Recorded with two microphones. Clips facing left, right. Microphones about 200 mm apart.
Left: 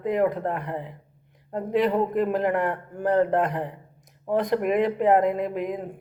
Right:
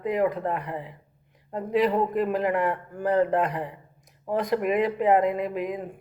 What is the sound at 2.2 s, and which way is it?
Speech, 50° left (ahead or behind).